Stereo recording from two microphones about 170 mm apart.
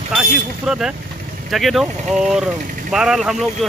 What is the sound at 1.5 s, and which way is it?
Speech, centre (ahead or behind).